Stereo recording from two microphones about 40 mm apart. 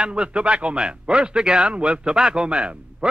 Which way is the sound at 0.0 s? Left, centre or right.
Right.